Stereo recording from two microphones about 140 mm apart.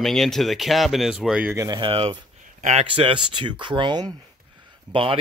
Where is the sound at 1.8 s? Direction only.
40° right (ahead or behind).